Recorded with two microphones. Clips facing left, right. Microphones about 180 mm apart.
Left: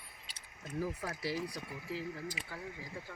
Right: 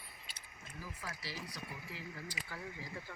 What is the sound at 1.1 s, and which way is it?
Speech, 50° left (ahead or behind).